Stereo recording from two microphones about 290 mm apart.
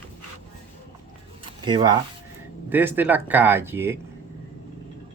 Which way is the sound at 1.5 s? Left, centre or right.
Centre.